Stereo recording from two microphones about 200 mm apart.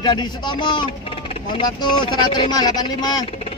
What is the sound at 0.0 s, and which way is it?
Speech, 20° left (ahead or behind).